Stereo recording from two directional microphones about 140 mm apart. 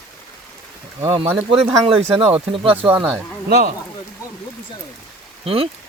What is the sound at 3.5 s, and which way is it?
Speech, 65° right (ahead or behind).